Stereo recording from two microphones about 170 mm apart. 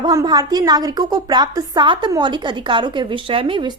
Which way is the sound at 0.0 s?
25° right (ahead or behind).